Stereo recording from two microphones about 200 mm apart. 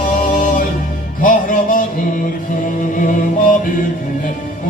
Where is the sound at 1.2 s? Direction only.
45° left (ahead or behind).